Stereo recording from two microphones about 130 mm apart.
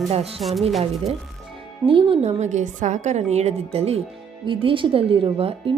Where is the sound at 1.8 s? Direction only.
40° right (ahead or behind).